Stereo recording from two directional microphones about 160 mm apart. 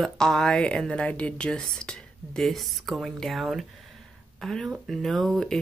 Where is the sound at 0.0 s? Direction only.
5° left (ahead or behind).